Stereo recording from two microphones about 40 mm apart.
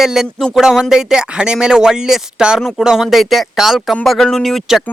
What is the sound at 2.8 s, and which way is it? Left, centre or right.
Speech, centre.